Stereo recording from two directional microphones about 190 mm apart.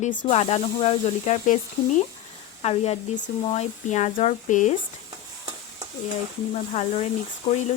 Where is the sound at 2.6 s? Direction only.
35° left (ahead or behind).